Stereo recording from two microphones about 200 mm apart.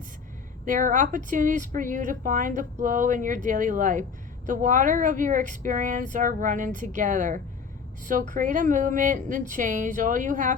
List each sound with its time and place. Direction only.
0.6 s a woman's voice: 40° right (ahead or behind)